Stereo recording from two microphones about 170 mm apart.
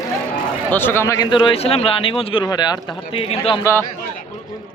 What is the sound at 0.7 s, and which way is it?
A man's voice, 10° left (ahead or behind).